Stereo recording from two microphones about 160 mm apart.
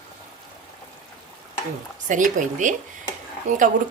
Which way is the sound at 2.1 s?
50° right (ahead or behind).